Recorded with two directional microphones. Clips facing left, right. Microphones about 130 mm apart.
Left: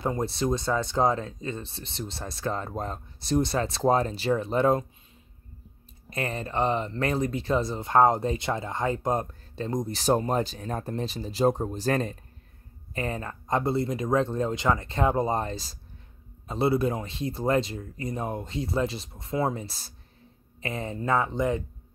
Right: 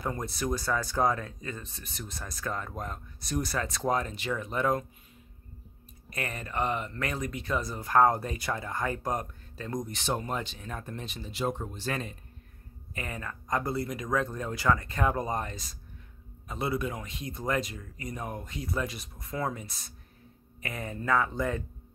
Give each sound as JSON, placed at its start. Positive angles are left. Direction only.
{"t": 0.0, "sound": "speech", "side_deg": 25}
{"t": 6.0, "sound": "speech", "side_deg": 30}